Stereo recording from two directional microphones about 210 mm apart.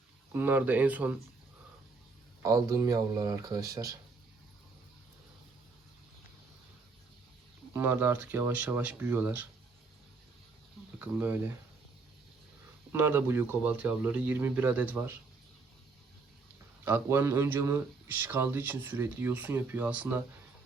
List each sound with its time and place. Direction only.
0.3 s speech: 10° right (ahead or behind)
2.4 s speech: 15° right (ahead or behind)
7.7 s speech: 10° right (ahead or behind)
11.0 s speech: 10° right (ahead or behind)
12.9 s speech: 10° right (ahead or behind)
16.8 s speech: 10° right (ahead or behind)